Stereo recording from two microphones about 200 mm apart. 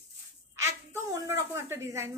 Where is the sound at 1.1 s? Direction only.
15° right (ahead or behind).